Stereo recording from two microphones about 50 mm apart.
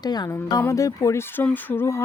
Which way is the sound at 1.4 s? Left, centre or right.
Left.